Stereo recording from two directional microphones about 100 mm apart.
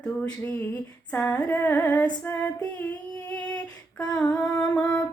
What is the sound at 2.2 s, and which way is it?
Music, 15° left (ahead or behind).